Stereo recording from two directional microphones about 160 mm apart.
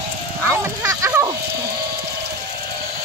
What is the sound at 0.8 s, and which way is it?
Bow-wow, 20° right (ahead or behind).